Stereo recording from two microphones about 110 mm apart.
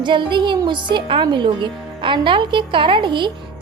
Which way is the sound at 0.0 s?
45° right (ahead or behind).